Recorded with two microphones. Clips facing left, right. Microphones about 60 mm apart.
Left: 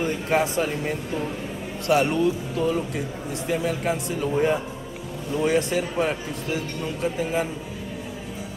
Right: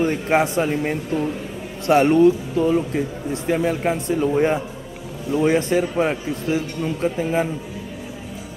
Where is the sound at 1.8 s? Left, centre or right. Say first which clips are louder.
Right 7 dB; right.